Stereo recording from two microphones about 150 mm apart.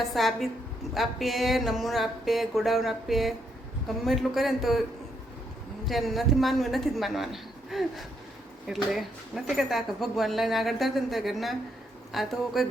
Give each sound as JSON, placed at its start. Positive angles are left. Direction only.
{"t": 0.0, "sound": "speech", "side_deg": 0}
{"t": 5.8, "sound": "speech", "side_deg": 0}